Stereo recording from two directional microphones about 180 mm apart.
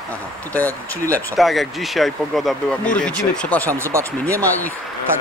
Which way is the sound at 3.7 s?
15° right (ahead or behind).